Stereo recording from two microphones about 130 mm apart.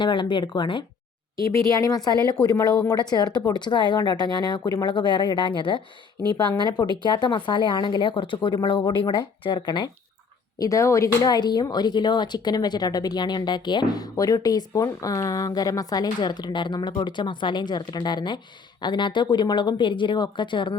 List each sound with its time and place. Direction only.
0.0 s speech: 40° left (ahead or behind)
1.4 s speech: 25° left (ahead or behind)
10.6 s speech: 25° left (ahead or behind)